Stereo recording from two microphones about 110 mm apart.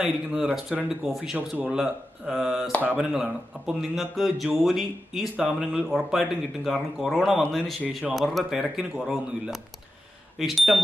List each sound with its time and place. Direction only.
0.0 s speech: 5° right (ahead or behind)
2.8 s speech: 15° right (ahead or behind)
3.1 s speech: 5° right (ahead or behind)